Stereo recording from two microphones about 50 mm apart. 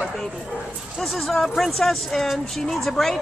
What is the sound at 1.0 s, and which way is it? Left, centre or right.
Speech, centre.